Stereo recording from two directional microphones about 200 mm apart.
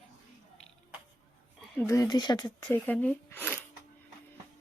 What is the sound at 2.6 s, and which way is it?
Speech, 10° left (ahead or behind).